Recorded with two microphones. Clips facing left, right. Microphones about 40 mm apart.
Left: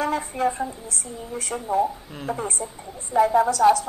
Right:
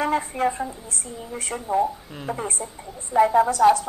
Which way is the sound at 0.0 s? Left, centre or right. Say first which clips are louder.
Right 1 dB; right.